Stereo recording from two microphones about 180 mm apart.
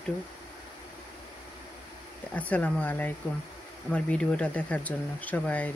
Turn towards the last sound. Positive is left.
turn(degrees=10)  # may be behind; listen again after turning